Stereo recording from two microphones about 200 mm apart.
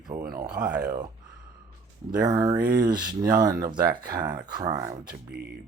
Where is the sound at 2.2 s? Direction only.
15° right (ahead or behind).